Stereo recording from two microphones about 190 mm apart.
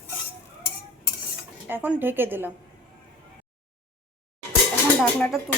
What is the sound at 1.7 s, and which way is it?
Speech, 10° right (ahead or behind).